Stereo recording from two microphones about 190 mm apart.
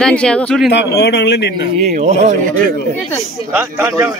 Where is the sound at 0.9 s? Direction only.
60° left (ahead or behind).